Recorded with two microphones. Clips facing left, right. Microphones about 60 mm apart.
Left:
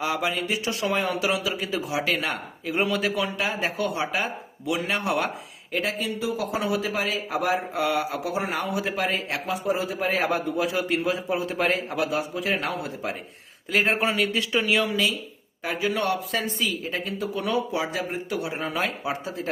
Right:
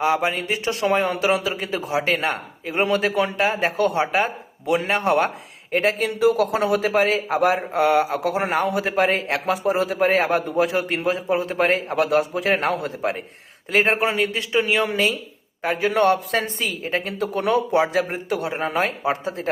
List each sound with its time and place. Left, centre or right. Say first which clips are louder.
0.0 s speech: right 5 dB; right
6.0 s speech: right 9 dB; right
9.5 s a man's voice: right 5 dB; right
10.1 s speech: right 5 dB; right
14.8 s speech: right 4 dB; right